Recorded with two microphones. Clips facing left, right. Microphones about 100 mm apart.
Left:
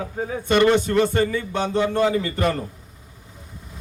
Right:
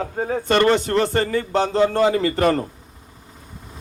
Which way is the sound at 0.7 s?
75° right (ahead or behind).